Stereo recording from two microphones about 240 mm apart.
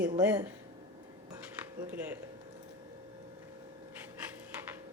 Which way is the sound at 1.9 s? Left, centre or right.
Centre.